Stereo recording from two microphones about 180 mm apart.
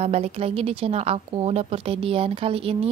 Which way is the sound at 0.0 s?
35° right (ahead or behind).